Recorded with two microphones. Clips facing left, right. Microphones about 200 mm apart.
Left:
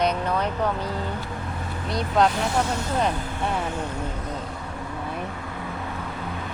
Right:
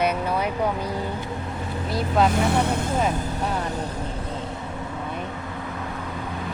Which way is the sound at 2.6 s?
55° right (ahead or behind).